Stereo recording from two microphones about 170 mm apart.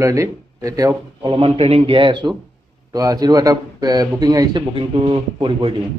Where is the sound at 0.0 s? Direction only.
15° right (ahead or behind).